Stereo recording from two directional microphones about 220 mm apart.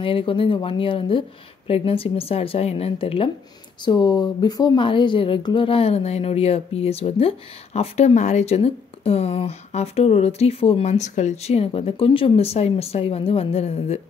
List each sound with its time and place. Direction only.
0.0 s speech: 25° left (ahead or behind)